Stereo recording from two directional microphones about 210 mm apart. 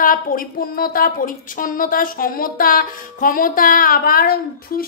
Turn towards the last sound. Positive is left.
turn(degrees=45)  # may be behind; listen again after turning